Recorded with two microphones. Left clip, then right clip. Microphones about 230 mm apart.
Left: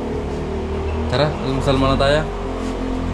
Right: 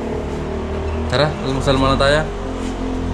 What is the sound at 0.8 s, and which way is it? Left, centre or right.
Speech, centre.